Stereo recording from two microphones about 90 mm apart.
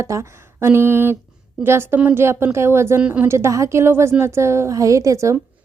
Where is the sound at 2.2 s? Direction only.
30° right (ahead or behind).